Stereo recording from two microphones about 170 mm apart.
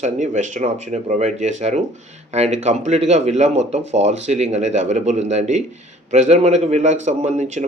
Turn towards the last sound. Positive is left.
turn(degrees=-45)  # may be behind; listen again after turning